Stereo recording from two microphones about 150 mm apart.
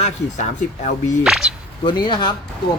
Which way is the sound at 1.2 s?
5° right (ahead or behind).